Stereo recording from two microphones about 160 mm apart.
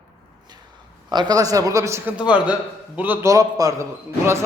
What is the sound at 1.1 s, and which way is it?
A man's voice, 25° right (ahead or behind).